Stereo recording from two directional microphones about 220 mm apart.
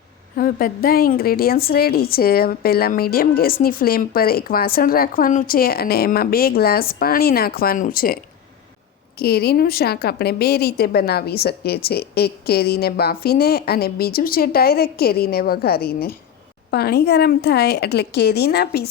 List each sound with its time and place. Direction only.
0.3 s a woman's voice: 40° left (ahead or behind)